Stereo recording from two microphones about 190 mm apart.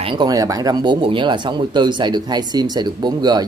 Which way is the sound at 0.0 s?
25° right (ahead or behind).